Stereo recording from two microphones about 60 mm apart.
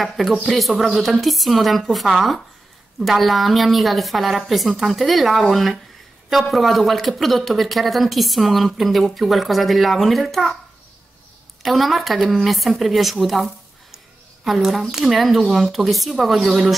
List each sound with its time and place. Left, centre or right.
0.5 s a woman's voice: centre
11.6 s a woman's voice: centre